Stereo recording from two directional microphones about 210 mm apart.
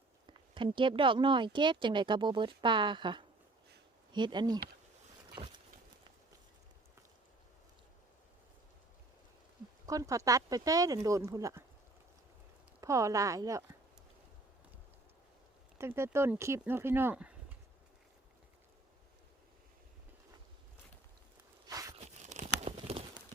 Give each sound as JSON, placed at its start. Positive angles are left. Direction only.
{"t": 0.3, "sound": "speech", "side_deg": -25}
{"t": 5.3, "sound": "boat", "side_deg": -20}
{"t": 9.8, "sound": "speech", "side_deg": -15}
{"t": 12.8, "sound": "speech", "side_deg": -15}
{"t": 15.8, "sound": "speech", "side_deg": -10}
{"t": 21.7, "sound": "a sound", "side_deg": -15}
{"t": 21.9, "sound": "tearing", "side_deg": -35}